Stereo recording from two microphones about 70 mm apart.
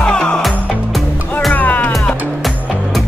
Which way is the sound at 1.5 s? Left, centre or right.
Left.